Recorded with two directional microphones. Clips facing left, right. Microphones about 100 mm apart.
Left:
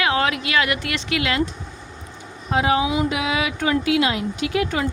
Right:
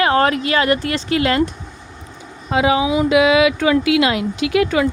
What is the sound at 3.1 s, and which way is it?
Speech, 90° right.